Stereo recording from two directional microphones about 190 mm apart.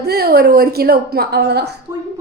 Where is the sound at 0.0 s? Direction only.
55° right (ahead or behind).